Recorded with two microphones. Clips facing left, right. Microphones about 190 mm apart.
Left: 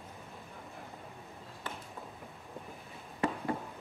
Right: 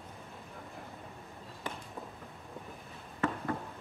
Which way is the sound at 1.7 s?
15° right (ahead or behind).